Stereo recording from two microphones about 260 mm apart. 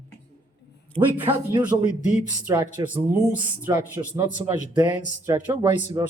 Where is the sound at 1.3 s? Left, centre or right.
Centre.